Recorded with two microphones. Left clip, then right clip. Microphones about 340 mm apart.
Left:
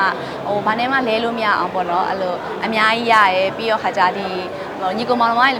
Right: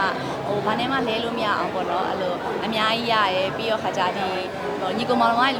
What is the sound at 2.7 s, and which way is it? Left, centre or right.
A woman's voice, centre.